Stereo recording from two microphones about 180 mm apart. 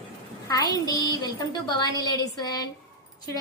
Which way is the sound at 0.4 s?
20° left (ahead or behind).